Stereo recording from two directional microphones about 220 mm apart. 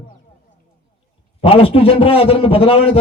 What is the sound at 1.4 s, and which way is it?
Speech, 25° left (ahead or behind).